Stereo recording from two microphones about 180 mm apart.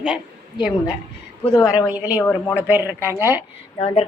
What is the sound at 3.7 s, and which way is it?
Speech, 30° left (ahead or behind).